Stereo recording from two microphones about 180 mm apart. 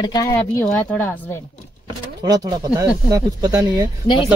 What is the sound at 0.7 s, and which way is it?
Speech, 5° left (ahead or behind).